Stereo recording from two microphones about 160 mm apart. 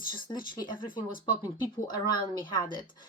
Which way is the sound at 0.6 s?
30° left (ahead or behind).